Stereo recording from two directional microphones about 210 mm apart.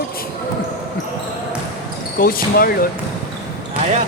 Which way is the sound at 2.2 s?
45° left (ahead or behind).